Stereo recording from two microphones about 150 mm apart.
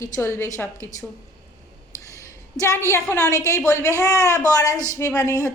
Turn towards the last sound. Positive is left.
turn(degrees=20)  # may be behind; listen again after turning